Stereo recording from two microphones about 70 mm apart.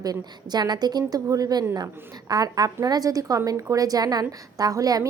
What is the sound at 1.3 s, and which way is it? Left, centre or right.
A woman's voice, right.